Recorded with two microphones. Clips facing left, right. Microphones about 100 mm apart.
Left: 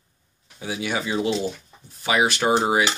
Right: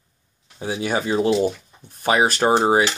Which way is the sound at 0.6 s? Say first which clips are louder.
Right 4 dB; 40° right (ahead or behind).